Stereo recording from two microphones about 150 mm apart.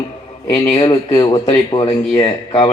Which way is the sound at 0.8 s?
30° left (ahead or behind).